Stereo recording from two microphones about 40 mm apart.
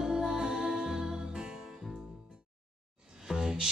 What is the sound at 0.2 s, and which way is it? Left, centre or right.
Music, centre.